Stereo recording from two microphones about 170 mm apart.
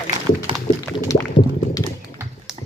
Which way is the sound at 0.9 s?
20° left (ahead or behind).